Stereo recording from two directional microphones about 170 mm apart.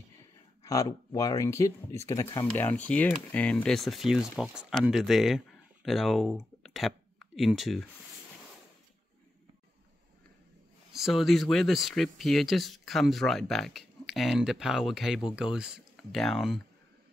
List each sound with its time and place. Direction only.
0.7 s speech: 20° left (ahead or behind); by 7.8 s centre (ahead or behind)
10.9 s speech: centre (ahead or behind)